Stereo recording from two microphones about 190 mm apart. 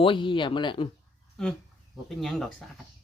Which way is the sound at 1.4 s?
5° left (ahead or behind).